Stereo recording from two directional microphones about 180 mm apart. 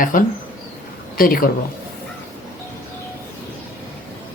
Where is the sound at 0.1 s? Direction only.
50° left (ahead or behind).